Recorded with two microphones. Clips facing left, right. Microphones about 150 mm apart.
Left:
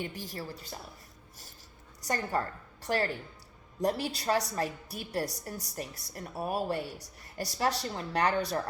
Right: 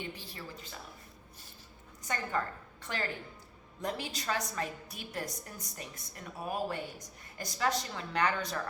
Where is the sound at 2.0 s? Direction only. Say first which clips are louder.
Left 3 dB; 35° left (ahead or behind).